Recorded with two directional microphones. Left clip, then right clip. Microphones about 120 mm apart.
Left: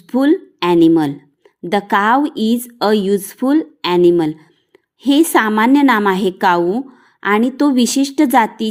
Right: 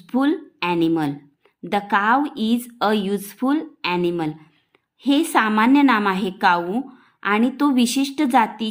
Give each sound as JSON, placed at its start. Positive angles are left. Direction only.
{"t": 0.1, "sound": "a woman's voice", "side_deg": 35}
{"t": 3.8, "sound": "a woman's voice", "side_deg": 45}